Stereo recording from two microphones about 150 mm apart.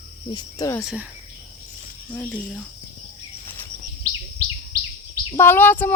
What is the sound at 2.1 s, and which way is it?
Speech, 10° left (ahead or behind).